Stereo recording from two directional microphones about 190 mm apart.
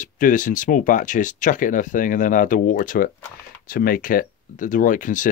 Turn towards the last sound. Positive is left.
turn(degrees=45)  # may be behind; listen again after turning